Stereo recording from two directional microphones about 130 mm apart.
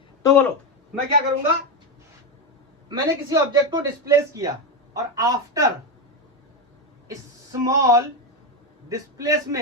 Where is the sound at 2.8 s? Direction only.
30° right (ahead or behind).